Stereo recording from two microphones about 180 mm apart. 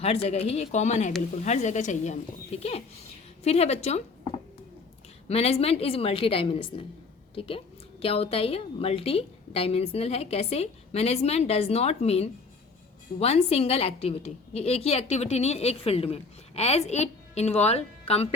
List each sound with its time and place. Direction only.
0.0 s a woman's voice: 35° left (ahead or behind)
5.3 s a woman's voice: 35° left (ahead or behind)